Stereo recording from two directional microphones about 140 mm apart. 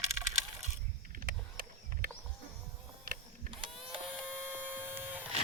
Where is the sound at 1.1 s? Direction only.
90° right.